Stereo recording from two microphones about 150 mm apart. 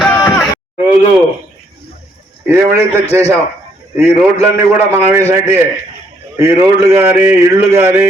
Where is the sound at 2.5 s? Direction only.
15° right (ahead or behind).